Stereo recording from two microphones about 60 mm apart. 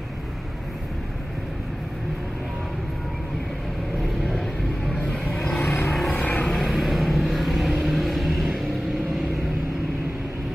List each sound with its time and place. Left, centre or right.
5.1 s vehicle: centre
6.1 s vehicle: left
6.5 s vehicle: centre